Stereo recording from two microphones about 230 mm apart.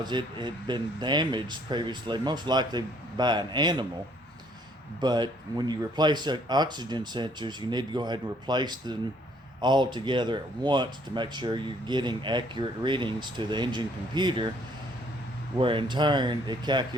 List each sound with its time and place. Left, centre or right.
0.0 s speech: centre
4.9 s speech: centre
15.5 s speech: right